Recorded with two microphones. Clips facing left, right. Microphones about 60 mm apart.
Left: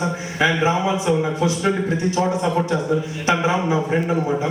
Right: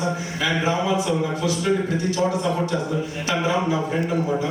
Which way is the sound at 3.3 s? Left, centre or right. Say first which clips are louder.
Left 3 dB; left.